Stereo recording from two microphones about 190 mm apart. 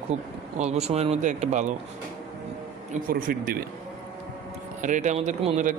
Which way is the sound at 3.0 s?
50° right (ahead or behind).